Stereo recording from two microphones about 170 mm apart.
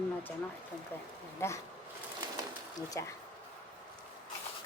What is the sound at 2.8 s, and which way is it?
Speech, 20° left (ahead or behind).